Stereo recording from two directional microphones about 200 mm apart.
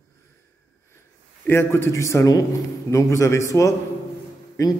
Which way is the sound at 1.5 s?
10° left (ahead or behind).